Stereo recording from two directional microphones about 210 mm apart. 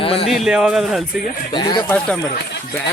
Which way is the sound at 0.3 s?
Centre (ahead or behind).